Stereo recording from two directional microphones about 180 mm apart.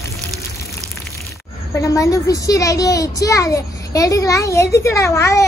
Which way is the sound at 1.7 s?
20° left (ahead or behind).